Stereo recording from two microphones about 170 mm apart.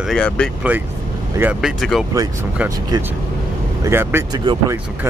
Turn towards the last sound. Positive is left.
turn(degrees=-15)  # may be behind; listen again after turning